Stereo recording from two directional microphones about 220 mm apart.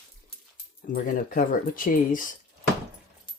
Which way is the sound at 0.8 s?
40° left (ahead or behind).